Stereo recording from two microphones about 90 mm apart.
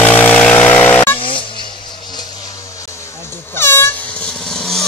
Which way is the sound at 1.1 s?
80° left.